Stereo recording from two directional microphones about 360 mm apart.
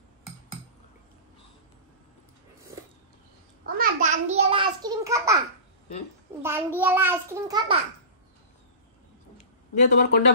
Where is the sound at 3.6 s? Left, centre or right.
Right; by 5.4 s centre.